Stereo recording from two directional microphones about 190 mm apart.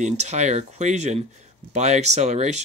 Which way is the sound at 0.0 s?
35° right (ahead or behind).